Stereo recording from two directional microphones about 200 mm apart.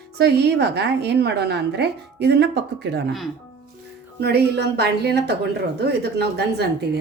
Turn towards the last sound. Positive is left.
turn(degrees=-55)  # may be behind; listen again after turning